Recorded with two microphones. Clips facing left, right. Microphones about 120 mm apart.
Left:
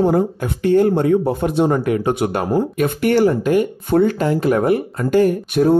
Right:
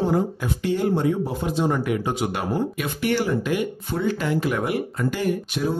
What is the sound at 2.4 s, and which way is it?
Speech, 45° left (ahead or behind).